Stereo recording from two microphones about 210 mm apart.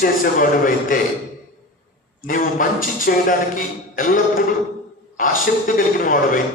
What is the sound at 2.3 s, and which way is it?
A man's voice, 40° left (ahead or behind).